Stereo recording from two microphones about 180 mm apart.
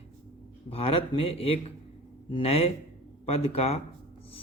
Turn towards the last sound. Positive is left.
turn(degrees=35)  # may be behind; listen again after turning